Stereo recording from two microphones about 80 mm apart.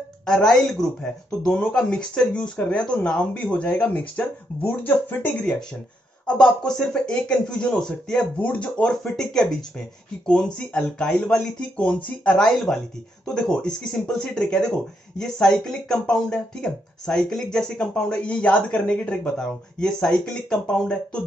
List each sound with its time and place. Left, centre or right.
0.3 s speech: centre; by 5.3 s left
6.2 s speech: centre